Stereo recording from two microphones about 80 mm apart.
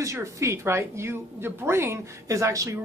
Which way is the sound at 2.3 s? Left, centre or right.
Right.